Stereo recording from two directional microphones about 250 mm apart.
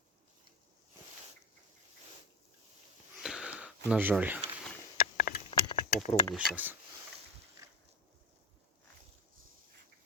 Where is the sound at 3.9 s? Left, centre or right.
Centre.